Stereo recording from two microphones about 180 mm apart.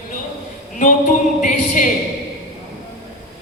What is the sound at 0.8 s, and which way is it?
Music, 45° left (ahead or behind).